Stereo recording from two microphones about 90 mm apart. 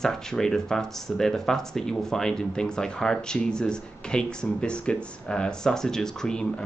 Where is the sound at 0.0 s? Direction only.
5° left (ahead or behind).